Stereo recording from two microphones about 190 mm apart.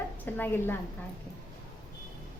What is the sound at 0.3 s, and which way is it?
Speech, 10° left (ahead or behind).